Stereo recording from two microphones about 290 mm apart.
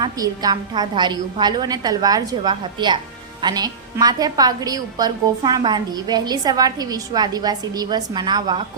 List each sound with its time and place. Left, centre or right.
0.0 s a woman's voice: centre